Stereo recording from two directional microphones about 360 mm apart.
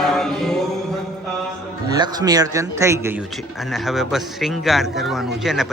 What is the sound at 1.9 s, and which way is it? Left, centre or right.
Speech, centre.